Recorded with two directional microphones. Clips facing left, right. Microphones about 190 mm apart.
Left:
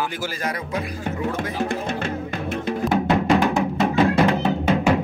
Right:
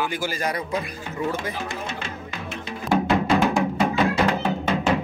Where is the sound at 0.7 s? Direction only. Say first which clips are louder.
Left 2 dB; 55° left (ahead or behind).